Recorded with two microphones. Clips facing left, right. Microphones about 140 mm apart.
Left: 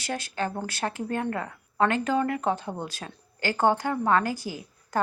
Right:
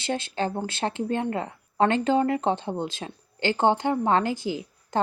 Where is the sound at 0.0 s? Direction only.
25° right (ahead or behind).